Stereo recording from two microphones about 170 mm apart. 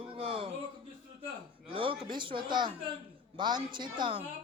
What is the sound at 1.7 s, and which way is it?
Speech, 30° right (ahead or behind).